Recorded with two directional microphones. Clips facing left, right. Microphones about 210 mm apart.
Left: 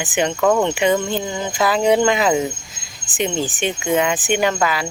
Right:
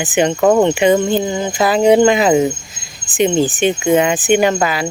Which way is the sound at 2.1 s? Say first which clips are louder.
Right 5 dB; 15° right (ahead or behind).